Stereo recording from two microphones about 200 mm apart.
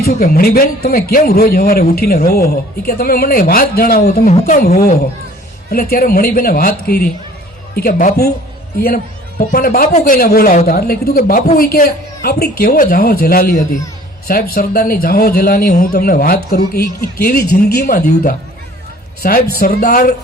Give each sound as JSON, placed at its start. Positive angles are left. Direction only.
{"t": 0.0, "sound": "speech", "side_deg": 50}
{"t": 9.5, "sound": "speech", "side_deg": 50}